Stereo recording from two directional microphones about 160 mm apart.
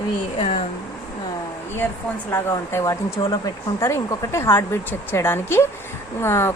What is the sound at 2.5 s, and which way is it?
A woman's voice, 20° left (ahead or behind).